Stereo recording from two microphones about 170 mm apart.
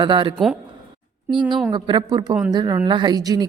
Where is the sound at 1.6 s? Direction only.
25° right (ahead or behind).